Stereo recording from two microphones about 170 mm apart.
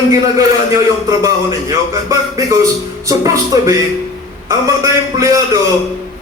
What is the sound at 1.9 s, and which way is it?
Speech, 20° right (ahead or behind).